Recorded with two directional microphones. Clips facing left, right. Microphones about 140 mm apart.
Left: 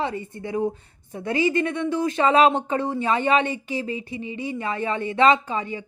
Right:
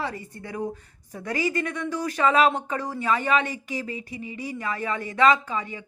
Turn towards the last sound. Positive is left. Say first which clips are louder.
# left 2 dB
turn(degrees=30)  # may be behind; listen again after turning